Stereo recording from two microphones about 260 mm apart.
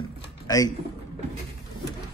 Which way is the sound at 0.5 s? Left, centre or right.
Centre.